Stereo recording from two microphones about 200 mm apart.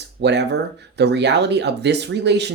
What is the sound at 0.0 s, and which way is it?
Speech, 60° right (ahead or behind).